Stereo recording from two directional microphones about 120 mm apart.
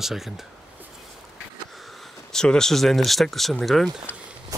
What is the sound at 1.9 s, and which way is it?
Speech, 5° left (ahead or behind).